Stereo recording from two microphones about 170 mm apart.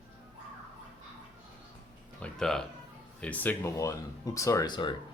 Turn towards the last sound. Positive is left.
turn(degrees=25)  # may be behind; listen again after turning